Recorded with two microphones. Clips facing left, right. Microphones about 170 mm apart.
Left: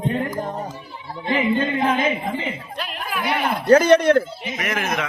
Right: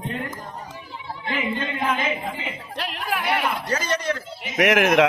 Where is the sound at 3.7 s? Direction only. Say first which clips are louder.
Left 12 dB; 60° left (ahead or behind).